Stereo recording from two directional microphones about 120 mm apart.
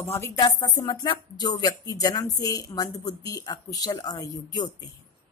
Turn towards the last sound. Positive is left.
turn(degrees=30)  # may be behind; listen again after turning